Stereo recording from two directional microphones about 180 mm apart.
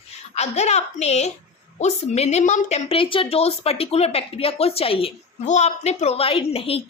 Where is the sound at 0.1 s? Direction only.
40° left (ahead or behind).